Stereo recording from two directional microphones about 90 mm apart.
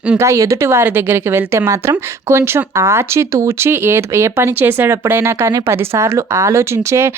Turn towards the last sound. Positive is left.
turn(degrees=-30)  # may be behind; listen again after turning